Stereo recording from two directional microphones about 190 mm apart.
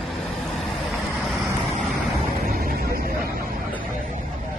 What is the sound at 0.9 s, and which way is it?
Vehicle, centre (ahead or behind).